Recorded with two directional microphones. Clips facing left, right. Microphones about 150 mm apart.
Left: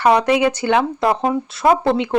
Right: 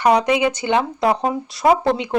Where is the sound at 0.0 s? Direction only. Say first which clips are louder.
Left 1 dB; 10° right (ahead or behind).